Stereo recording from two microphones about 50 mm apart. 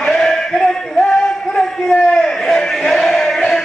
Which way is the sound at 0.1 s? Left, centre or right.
Centre.